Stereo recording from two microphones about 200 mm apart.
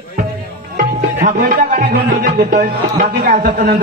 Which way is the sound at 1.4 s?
45° right (ahead or behind).